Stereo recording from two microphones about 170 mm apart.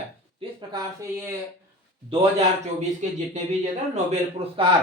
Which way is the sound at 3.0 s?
45° right (ahead or behind).